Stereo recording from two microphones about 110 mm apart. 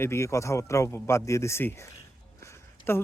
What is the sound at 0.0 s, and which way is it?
Speech, 25° left (ahead or behind).